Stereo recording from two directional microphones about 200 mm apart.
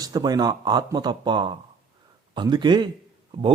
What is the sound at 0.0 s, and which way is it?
A man's voice, 20° right (ahead or behind).